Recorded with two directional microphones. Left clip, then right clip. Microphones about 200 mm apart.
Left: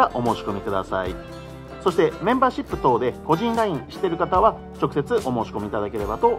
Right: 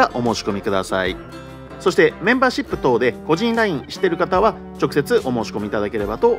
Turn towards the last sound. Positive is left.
turn(degrees=-25)  # may be behind; listen again after turning